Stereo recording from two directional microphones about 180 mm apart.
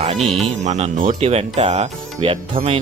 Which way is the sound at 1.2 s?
35° right (ahead or behind).